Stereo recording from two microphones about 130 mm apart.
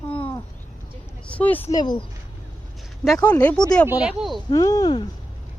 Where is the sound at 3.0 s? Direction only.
5° left (ahead or behind).